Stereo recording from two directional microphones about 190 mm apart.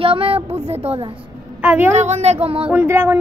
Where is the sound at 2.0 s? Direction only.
35° right (ahead or behind).